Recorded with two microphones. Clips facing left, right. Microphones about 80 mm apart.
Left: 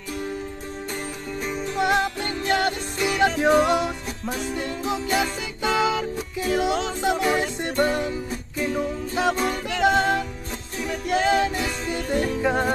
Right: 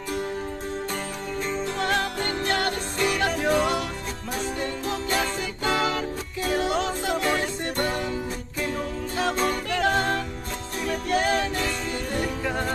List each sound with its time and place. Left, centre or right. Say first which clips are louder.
1.4 s music: left 3 dB; centre
9.1 s music: left 1 dB; centre